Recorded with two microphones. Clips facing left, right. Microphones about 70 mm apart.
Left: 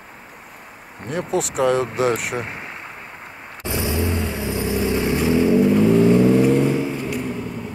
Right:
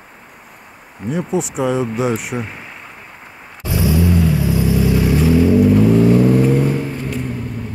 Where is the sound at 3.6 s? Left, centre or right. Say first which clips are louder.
Right 6 dB; left.